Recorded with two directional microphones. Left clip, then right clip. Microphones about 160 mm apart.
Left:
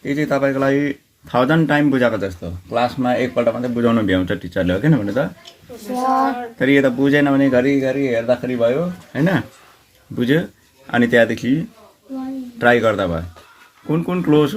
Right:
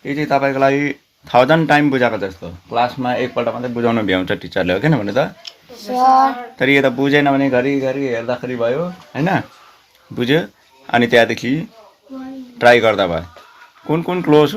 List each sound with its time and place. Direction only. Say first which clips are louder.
0.0 s speech: right 2 dB; 25° right (ahead or behind); by 5.3 s 40° right (ahead or behind)
6.6 s speech: right 2 dB; 35° right (ahead or behind)